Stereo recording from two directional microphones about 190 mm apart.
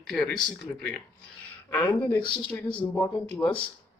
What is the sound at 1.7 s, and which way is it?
Speech, 10° left (ahead or behind).